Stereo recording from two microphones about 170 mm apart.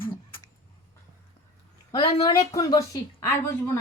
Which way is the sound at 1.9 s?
25° left (ahead or behind).